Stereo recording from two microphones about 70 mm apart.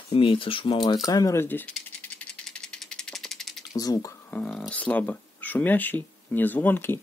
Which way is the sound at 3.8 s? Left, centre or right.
Left.